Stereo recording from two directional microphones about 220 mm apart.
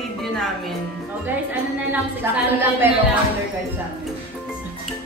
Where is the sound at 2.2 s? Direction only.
10° right (ahead or behind).